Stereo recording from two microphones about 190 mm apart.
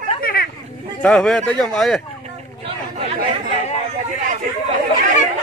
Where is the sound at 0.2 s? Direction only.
50° left (ahead or behind).